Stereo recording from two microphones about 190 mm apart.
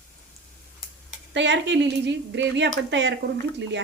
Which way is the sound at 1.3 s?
70° right (ahead or behind).